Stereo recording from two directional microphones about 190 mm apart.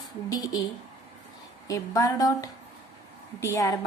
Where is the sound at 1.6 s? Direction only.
20° left (ahead or behind).